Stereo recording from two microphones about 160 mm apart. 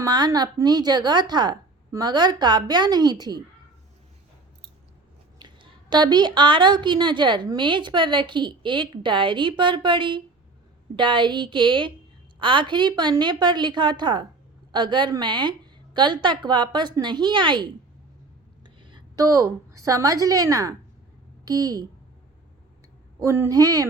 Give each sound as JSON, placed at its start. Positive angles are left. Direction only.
{"t": 0.0, "sound": "a woman's voice", "side_deg": -25}
{"t": 5.4, "sound": "a woman's voice", "side_deg": -30}
{"t": 23.2, "sound": "a woman's voice", "side_deg": -20}